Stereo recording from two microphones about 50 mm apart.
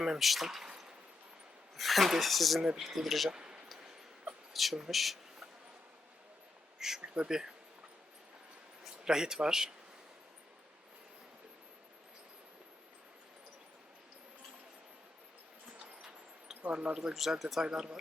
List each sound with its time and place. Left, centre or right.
0.0 s speech: centre
1.7 s speech: centre
3.2 s a sound: centre
4.5 s speech: centre
6.7 s speech: centre
7.0 s speech: right
7.3 s speech: centre
9.0 s speech: centre
16.6 s speech: right
17.2 s speech: centre